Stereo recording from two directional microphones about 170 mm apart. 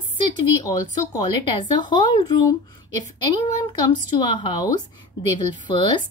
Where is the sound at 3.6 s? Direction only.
25° left (ahead or behind).